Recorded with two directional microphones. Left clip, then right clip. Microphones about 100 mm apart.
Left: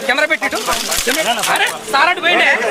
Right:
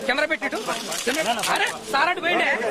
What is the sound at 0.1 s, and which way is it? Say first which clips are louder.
Speech: left 8 dB; 20° right (ahead or behind).